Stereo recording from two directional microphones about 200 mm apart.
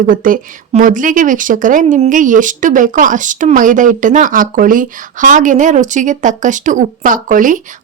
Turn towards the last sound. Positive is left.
turn(degrees=-40)  # may be behind; listen again after turning